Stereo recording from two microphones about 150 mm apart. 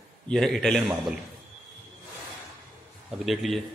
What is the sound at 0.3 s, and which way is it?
Speech, 5° left (ahead or behind).